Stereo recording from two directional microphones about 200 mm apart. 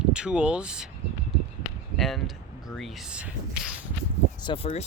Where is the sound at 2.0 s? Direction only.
Centre (ahead or behind).